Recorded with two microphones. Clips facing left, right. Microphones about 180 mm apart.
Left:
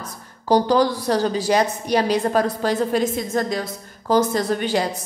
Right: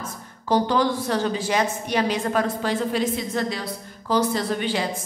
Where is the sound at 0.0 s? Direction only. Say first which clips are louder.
Even; 35° left (ahead or behind).